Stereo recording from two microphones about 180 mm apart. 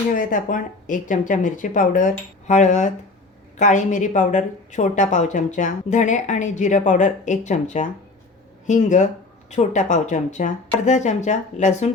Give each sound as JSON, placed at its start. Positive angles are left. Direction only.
{"t": 0.1, "sound": "a woman's voice", "side_deg": 50}